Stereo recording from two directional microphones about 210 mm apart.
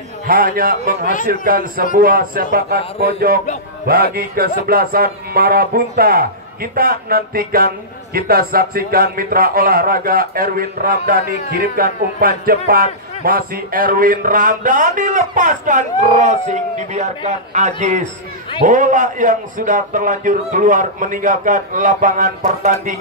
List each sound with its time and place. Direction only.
0.3 s speech: 45° right (ahead or behind)
3.8 s speech: 45° right (ahead or behind)